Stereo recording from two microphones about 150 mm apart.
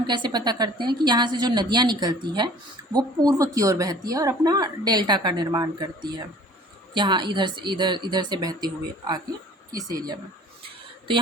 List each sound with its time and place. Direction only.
0.0 s speech: 30° right (ahead or behind)